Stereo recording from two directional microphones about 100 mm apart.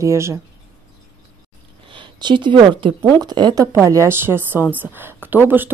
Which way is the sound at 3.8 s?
30° right (ahead or behind).